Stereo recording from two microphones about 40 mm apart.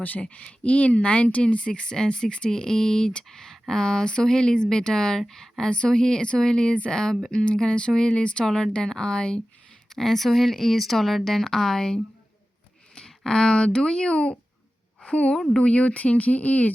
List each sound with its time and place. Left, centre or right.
0.0 s speech: left
3.2 s speech: centre; by 8.4 s left
8.4 s speech: centre
9.9 s speech: centre
12.9 s a sound: centre
13.7 s a woman's voice: left